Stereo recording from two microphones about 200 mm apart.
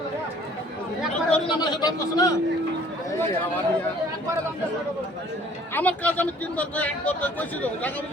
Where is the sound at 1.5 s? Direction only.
20° left (ahead or behind).